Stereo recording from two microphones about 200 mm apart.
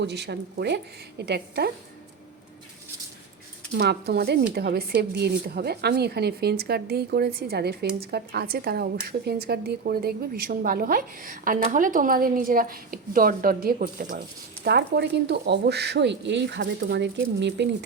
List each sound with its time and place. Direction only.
0.0 s a woman's voice: 55° right (ahead or behind)
3.8 s a woman's voice: 55° right (ahead or behind)